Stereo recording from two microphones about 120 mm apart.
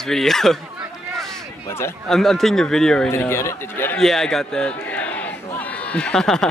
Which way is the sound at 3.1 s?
20° left (ahead or behind).